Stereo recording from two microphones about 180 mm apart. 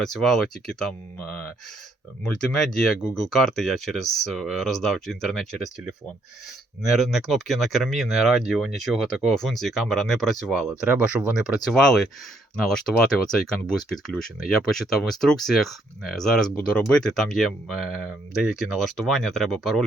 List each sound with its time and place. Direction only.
0.0 s speech: centre (ahead or behind)
2.2 s speech: 5° left (ahead or behind)
6.9 s speech: centre (ahead or behind)